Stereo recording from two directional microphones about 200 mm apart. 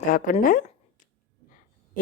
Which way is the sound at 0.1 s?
45° left (ahead or behind).